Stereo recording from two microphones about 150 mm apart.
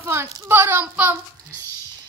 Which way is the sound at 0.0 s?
15° right (ahead or behind).